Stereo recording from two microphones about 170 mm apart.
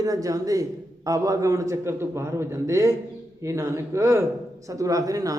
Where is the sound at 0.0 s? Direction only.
20° right (ahead or behind).